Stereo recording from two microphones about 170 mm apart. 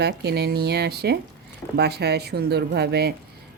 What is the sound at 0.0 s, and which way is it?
Speech, 75° right (ahead or behind).